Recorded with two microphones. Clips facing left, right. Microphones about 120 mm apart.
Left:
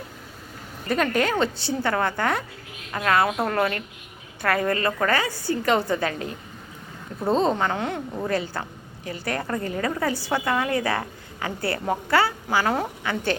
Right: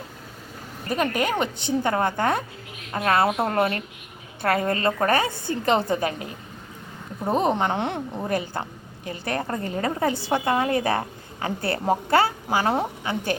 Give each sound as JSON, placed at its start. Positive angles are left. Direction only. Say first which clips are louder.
{"t": 0.9, "sound": "a woman's voice", "louder": "left 1 dB", "side_deg": -15}
{"t": 7.3, "sound": "a woman's voice", "louder": "even", "side_deg": -15}